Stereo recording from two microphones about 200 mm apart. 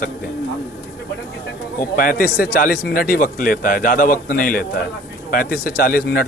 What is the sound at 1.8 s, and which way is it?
Speech, 45° left (ahead or behind).